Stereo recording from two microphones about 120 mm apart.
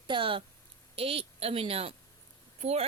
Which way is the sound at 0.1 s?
45° right (ahead or behind).